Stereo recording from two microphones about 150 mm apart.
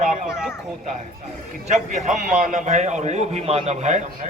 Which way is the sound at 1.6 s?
55° right (ahead or behind).